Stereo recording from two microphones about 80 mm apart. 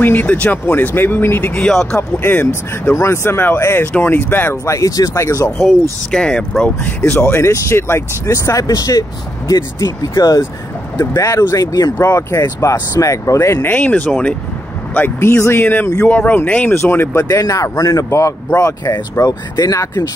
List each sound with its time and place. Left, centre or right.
0.0 s speech: left
1.7 s speech: centre
2.0 s speech: left
4.6 s speech: left
5.6 s speech: centre
7.0 s speech: left
12.0 s speech: left
13.7 s speech: centre
17.2 s speech: left